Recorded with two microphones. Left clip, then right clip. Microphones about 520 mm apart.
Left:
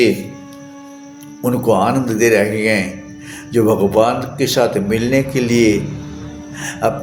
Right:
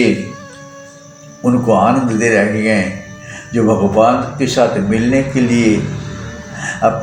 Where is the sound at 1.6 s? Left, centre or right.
Left.